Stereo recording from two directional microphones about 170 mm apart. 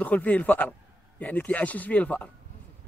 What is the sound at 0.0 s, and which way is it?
Speech, 10° left (ahead or behind).